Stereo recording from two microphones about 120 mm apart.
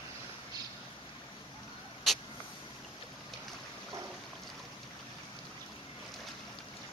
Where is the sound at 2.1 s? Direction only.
Centre (ahead or behind).